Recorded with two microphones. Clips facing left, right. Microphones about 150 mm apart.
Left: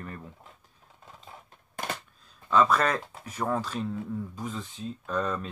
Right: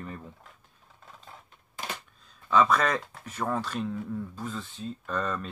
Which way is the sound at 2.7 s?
5° left (ahead or behind).